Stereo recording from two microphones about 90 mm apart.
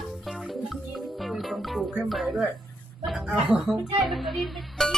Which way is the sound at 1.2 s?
Centre (ahead or behind).